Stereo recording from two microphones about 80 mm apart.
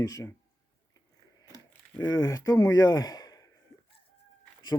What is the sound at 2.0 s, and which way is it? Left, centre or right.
Speech, left.